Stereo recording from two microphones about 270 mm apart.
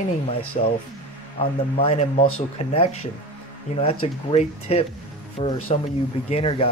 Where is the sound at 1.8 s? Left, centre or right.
Left.